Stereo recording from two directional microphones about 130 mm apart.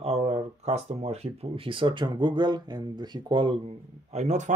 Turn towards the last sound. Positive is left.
turn(degrees=-60)  # may be behind; listen again after turning